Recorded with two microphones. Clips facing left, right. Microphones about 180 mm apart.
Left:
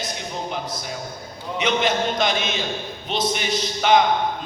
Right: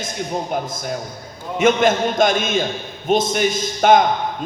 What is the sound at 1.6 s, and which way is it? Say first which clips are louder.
A man's voice: right 6 dB; 50° right (ahead or behind).